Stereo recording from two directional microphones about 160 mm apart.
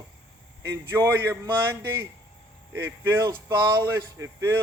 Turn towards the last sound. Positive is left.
turn(degrees=-15)  # may be behind; listen again after turning